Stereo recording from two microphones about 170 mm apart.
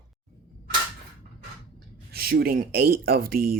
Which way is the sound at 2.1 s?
65° right (ahead or behind).